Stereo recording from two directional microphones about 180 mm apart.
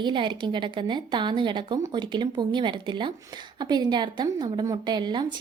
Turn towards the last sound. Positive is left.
turn(degrees=-25)  # may be behind; listen again after turning